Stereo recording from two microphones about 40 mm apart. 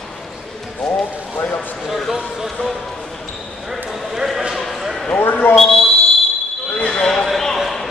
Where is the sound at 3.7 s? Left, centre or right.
Centre.